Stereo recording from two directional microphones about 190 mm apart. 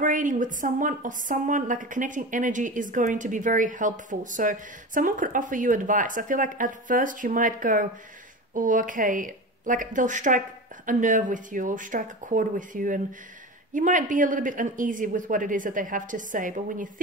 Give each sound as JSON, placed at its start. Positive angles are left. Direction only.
{"t": 0.0, "sound": "a woman's voice", "side_deg": -45}